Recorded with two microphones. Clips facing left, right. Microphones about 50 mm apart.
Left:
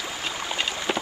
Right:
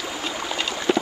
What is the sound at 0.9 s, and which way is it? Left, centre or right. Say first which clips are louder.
Clip-clop: right 7 dB; centre.